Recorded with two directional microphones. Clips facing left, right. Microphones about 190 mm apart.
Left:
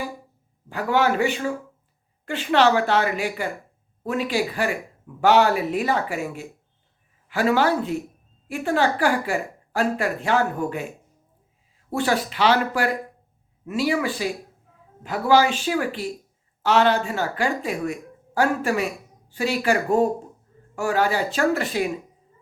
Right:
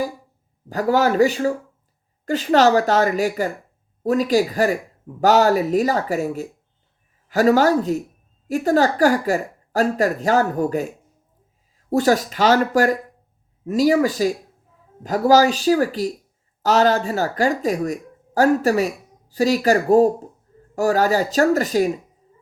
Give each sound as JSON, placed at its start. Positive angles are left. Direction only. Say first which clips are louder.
{"t": 0.7, "sound": "speech", "louder": "right 3 dB", "side_deg": -40}